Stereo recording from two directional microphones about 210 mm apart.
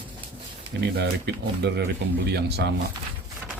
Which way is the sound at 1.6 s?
55° right (ahead or behind).